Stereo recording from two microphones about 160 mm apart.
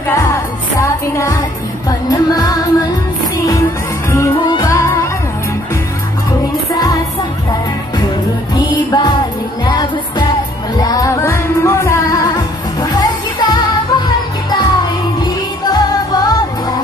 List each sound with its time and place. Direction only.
0.1 s music: 20° left (ahead or behind)
4.6 s music: 15° left (ahead or behind)
8.5 s music: 25° left (ahead or behind)